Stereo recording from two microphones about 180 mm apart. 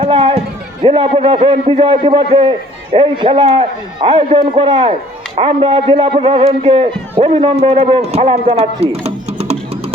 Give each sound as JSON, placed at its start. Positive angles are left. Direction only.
{"t": 0.0, "sound": "a man's voice", "side_deg": -30}